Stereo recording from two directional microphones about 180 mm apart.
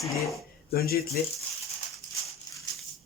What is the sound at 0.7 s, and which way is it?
Speech, 60° left (ahead or behind).